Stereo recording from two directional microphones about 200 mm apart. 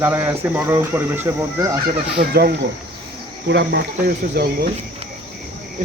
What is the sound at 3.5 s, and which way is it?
Speech, 60° right (ahead or behind).